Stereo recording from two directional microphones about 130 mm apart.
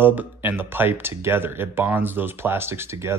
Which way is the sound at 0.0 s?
15° right (ahead or behind).